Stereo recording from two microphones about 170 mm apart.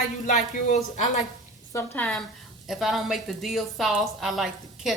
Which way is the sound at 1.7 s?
10° left (ahead or behind).